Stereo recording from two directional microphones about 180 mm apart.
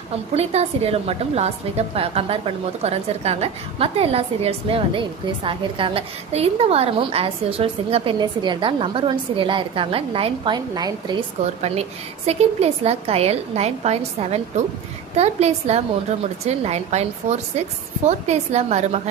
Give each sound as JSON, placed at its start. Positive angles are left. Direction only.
{"t": 0.3, "sound": "a woman's voice", "side_deg": -35}
{"t": 11.6, "sound": "a woman's voice", "side_deg": -35}